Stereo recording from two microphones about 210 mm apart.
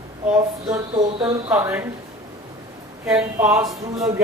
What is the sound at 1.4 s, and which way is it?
Speech, 10° right (ahead or behind).